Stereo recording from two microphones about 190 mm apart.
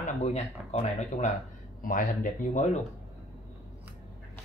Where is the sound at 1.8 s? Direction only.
45° left (ahead or behind).